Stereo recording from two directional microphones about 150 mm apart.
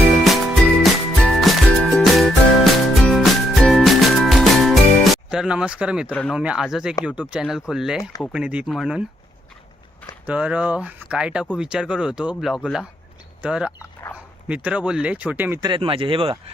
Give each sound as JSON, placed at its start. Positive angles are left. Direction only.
{"t": 0.3, "sound": "music", "side_deg": 0}
{"t": 6.1, "sound": "speech", "side_deg": 10}
{"t": 6.3, "sound": "speech", "side_deg": -5}
{"t": 10.2, "sound": "speech", "side_deg": -10}
{"t": 15.6, "sound": "speech", "side_deg": -35}